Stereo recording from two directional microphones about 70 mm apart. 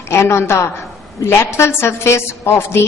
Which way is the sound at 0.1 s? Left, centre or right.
Left.